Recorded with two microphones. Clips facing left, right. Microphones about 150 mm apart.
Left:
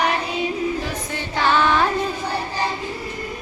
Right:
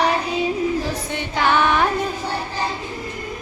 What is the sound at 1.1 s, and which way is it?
Female singing, 15° right (ahead or behind).